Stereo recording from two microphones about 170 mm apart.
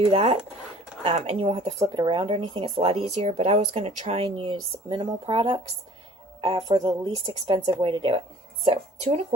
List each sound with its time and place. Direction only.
0.1 s speech: 35° right (ahead or behind)